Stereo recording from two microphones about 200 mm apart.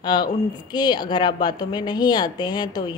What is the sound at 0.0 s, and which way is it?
A woman's voice, 20° left (ahead or behind).